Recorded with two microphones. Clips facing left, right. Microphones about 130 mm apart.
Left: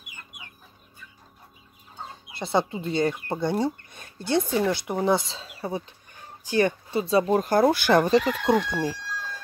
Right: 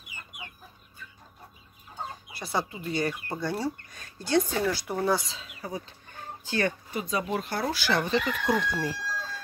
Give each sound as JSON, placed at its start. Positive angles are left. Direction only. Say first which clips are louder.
{"t": 2.3, "sound": "speech", "louder": "left 7 dB", "side_deg": 25}
{"t": 6.5, "sound": "speech", "louder": "left 6 dB", "side_deg": 15}
{"t": 7.0, "sound": "speech", "louder": "left 9 dB", "side_deg": 30}
{"t": 8.5, "sound": "chicken", "louder": "left 4 dB", "side_deg": 20}